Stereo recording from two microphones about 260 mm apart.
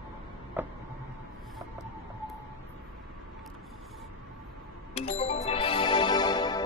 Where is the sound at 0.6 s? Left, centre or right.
Centre.